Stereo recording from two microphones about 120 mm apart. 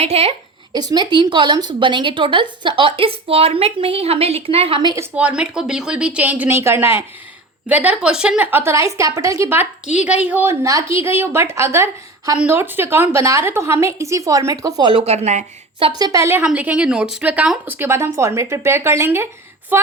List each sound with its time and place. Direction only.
0.0 s a woman's voice: 60° right (ahead or behind)
0.7 s a woman's voice: 35° right (ahead or behind); by 4.8 s 55° right (ahead or behind)
5.1 s a woman's voice: 10° right (ahead or behind)
10.0 s a woman's voice: 10° right (ahead or behind)
10.5 s speech: 25° right (ahead or behind)
15.0 s a woman's voice: 65° right (ahead or behind)
15.8 s a woman's voice: 35° right (ahead or behind)
16.4 s a woman's voice: 10° right (ahead or behind)
17.7 s a woman's voice: 20° right (ahead or behind)